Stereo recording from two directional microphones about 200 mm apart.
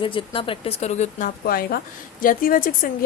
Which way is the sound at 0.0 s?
25° left (ahead or behind).